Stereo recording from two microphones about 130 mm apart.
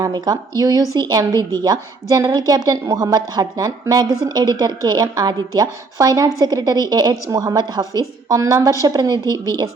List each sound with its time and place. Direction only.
0.0 s a woman's voice: 30° right (ahead or behind)